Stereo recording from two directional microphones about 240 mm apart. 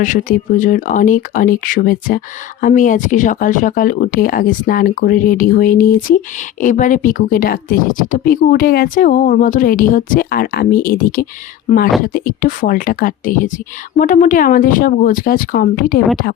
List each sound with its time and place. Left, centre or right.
0.0 s speech: left
11.7 s speech: left
12.0 s speech: left